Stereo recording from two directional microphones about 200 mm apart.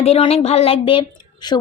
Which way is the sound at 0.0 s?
30° left (ahead or behind).